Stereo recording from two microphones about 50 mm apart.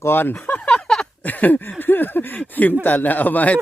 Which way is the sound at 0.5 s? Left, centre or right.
Left.